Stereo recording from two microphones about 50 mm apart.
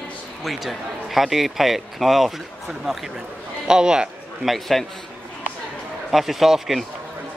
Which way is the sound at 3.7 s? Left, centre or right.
Centre.